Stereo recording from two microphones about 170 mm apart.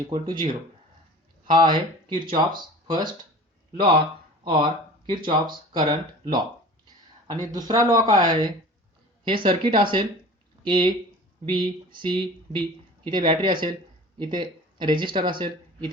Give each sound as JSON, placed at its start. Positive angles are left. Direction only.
{"t": 0.1, "sound": "speech", "side_deg": -30}
{"t": 4.4, "sound": "speech", "side_deg": -30}
{"t": 7.4, "sound": "speech", "side_deg": -20}